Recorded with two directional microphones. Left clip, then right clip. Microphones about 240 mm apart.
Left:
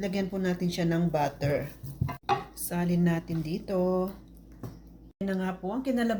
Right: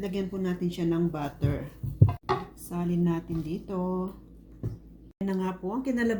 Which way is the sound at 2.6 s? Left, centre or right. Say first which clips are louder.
Left 1 dB; left.